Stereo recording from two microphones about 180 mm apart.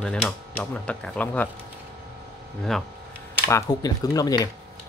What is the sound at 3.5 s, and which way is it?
Speech, 20° left (ahead or behind).